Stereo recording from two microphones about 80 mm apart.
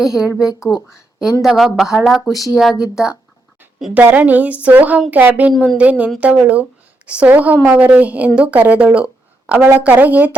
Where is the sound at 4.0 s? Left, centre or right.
Right.